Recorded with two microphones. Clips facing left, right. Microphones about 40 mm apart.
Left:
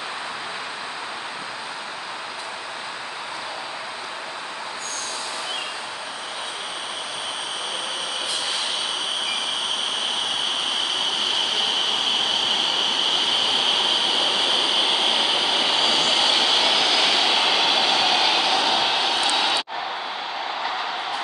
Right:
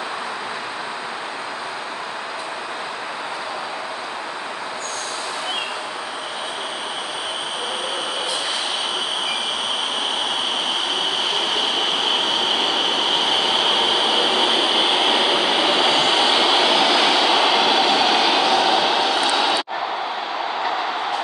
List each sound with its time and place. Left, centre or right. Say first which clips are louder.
12.1 s vehicle: right 2 dB; centre